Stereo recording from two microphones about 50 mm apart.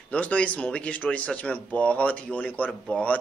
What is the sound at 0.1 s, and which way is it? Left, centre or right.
A man's voice, left.